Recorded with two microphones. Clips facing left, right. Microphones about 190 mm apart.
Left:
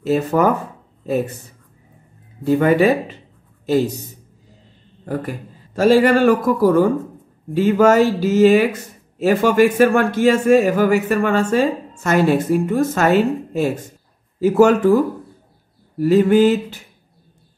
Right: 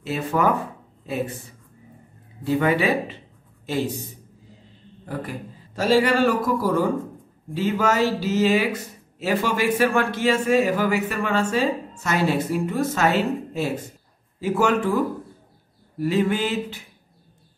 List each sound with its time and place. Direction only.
0.0 s a man's voice: 40° left (ahead or behind)
2.4 s a man's voice: 45° left (ahead or behind)
5.8 s a man's voice: 50° left (ahead or behind)
16.0 s a man's voice: 40° left (ahead or behind)